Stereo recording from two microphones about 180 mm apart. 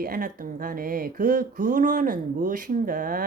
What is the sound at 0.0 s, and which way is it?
Speech, 55° right (ahead or behind).